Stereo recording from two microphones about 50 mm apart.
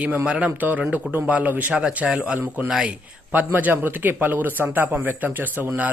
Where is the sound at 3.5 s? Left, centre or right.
Right.